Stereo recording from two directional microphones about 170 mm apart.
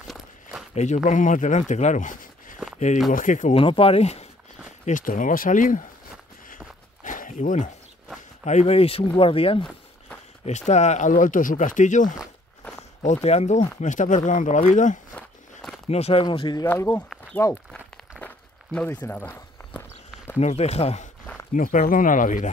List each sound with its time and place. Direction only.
0.0 s walk: centre (ahead or behind)
0.7 s speech: 45° left (ahead or behind)
3.5 s speech: 30° left (ahead or behind)
4.8 s speech: 50° left (ahead or behind)
7.0 s walk: 50° left (ahead or behind)
8.5 s speech: 40° left (ahead or behind)
15.9 s speech: 35° left (ahead or behind)
16.6 s speech: 15° left (ahead or behind)
18.2 s walk: 10° left (ahead or behind)
20.3 s speech: 40° left (ahead or behind)
21.5 s speech: 55° left (ahead or behind)